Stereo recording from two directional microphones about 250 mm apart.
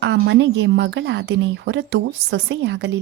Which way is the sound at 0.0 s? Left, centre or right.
Right.